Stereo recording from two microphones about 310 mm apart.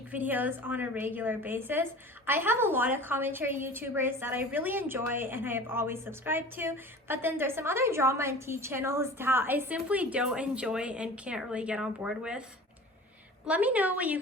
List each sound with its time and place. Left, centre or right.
0.1 s a woman's voice: centre